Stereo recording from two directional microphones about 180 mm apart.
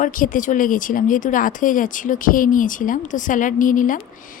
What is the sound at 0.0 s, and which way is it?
Speech, 50° left (ahead or behind).